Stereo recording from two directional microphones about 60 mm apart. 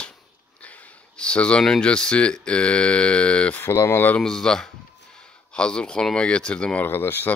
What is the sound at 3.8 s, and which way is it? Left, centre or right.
Speech, left.